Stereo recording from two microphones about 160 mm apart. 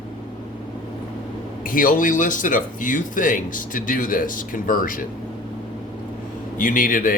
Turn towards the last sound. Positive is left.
turn(degrees=60)  # may be behind; listen again after turning